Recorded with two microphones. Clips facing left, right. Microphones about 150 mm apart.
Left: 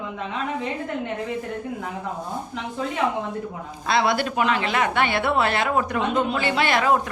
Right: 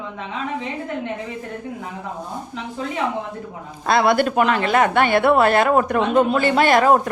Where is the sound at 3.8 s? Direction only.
50° right (ahead or behind).